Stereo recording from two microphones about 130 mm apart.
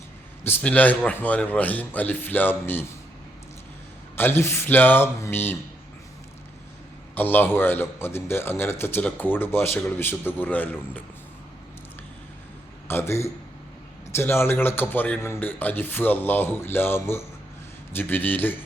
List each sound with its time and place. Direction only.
0.4 s a man's voice: 15° left (ahead or behind)
4.2 s a man's voice: 20° left (ahead or behind)
7.2 s a man's voice: 15° left (ahead or behind)
12.9 s a man's voice: 20° left (ahead or behind)